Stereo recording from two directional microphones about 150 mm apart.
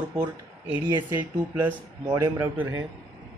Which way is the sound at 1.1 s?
10° right (ahead or behind).